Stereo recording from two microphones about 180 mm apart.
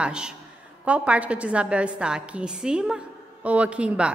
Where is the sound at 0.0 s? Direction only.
5° right (ahead or behind).